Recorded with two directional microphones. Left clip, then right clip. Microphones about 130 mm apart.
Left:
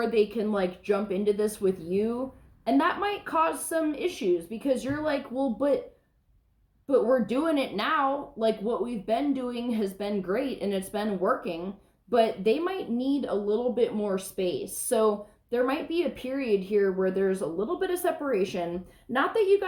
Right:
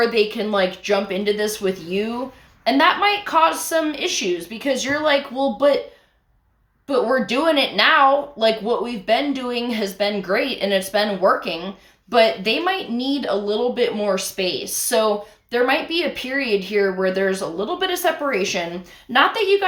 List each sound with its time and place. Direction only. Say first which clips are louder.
0.1 s speech: right 6 dB; 15° right (ahead or behind)
6.8 s speech: right 4 dB; 20° right (ahead or behind)